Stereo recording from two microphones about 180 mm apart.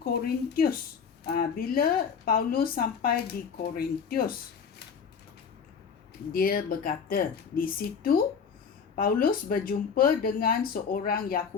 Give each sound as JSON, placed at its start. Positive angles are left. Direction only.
{"t": 0.0, "sound": "speech", "side_deg": 55}
{"t": 6.3, "sound": "speech", "side_deg": 55}